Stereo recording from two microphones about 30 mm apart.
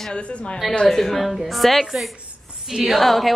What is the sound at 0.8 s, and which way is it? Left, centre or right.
A woman's voice, centre.